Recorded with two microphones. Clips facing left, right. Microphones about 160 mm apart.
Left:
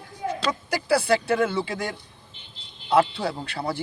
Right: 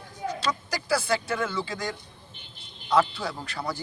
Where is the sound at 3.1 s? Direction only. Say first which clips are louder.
Left 4 dB; 30° left (ahead or behind).